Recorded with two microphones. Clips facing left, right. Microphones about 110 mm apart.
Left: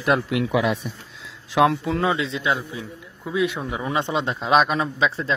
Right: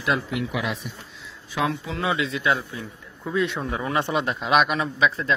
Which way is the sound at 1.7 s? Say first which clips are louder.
Left 6 dB; 50° left (ahead or behind).